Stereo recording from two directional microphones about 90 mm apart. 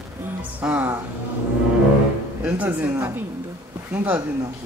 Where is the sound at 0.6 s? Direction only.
20° right (ahead or behind).